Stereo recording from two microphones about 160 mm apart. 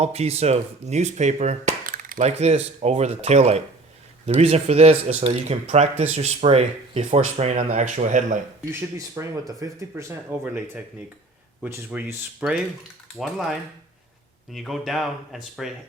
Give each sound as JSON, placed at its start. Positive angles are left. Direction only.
{"t": 0.0, "sound": "speech", "side_deg": -40}
{"t": 8.7, "sound": "speech", "side_deg": -15}
{"t": 11.6, "sound": "speech", "side_deg": -10}